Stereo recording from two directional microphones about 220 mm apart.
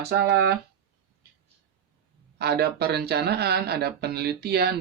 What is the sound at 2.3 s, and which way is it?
Speech, 45° right (ahead or behind).